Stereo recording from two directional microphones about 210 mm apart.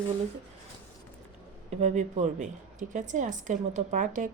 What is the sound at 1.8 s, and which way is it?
Speech, 35° right (ahead or behind).